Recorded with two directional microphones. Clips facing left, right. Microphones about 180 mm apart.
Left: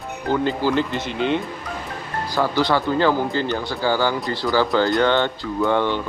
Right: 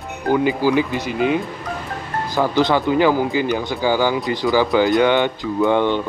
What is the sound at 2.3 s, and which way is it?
Speech, 20° right (ahead or behind).